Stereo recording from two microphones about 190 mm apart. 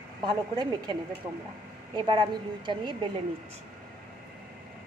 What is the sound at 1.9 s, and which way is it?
Speech, 25° right (ahead or behind).